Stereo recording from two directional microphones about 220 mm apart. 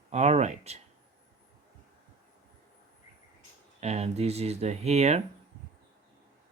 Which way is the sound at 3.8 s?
30° right (ahead or behind).